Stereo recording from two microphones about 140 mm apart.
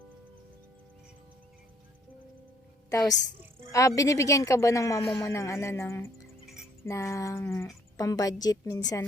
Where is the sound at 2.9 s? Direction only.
25° left (ahead or behind).